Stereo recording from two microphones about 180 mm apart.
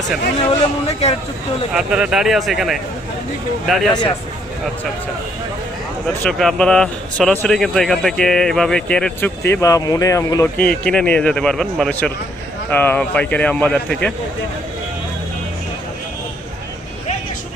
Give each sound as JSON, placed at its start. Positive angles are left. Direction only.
{"t": 0.3, "sound": "speech", "side_deg": 35}
{"t": 1.7, "sound": "speech", "side_deg": -5}
{"t": 6.2, "sound": "speech", "side_deg": 0}
{"t": 9.4, "sound": "speech", "side_deg": 15}